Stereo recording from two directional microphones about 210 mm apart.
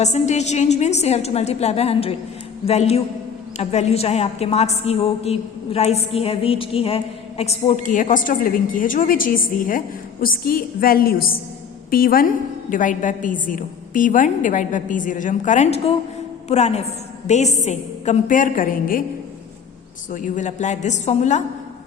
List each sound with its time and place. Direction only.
0.0 s a woman's voice: 35° left (ahead or behind)
20.1 s a woman's voice: 40° left (ahead or behind)